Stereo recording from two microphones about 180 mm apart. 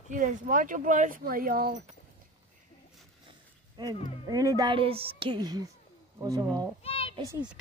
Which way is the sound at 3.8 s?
20° right (ahead or behind).